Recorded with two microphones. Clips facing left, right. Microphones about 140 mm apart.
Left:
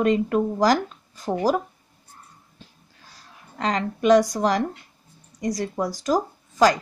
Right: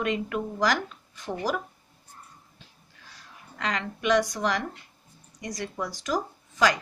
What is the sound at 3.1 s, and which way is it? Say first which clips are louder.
Speech: left 6 dB; 35° left (ahead or behind).